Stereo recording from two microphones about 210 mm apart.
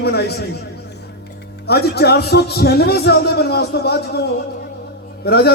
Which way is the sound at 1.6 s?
50° left (ahead or behind).